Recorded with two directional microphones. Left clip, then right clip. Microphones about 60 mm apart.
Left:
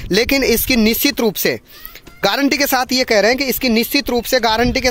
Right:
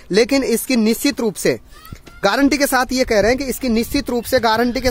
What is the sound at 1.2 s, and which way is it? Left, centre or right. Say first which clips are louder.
Speech: left 2 dB; centre.